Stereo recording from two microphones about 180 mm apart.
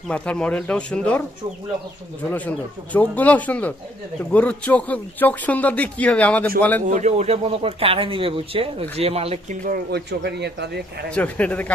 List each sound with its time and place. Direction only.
0.1 s speech: 5° left (ahead or behind)
2.3 s speech: 10° left (ahead or behind)
6.8 s speech: 40° right (ahead or behind)
9.6 s speech: 60° right (ahead or behind)
11.1 s speech: 10° left (ahead or behind)